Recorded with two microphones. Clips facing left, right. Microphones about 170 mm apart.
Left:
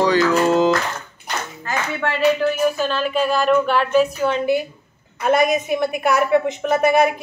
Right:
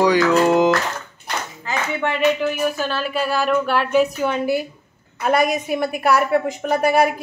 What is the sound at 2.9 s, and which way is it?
A woman's voice, 10° right (ahead or behind).